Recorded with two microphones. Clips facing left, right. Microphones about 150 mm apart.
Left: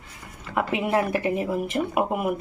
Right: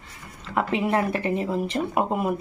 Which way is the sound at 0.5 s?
15° left (ahead or behind).